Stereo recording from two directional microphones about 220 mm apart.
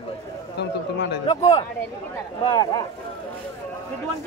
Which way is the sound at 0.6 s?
50° left (ahead or behind).